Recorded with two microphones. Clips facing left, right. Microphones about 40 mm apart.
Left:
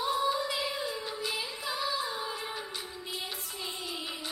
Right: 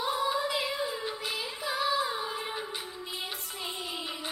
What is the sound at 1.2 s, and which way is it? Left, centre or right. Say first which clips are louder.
Music: even; right.